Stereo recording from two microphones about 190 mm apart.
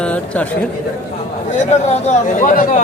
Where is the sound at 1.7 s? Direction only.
40° left (ahead or behind).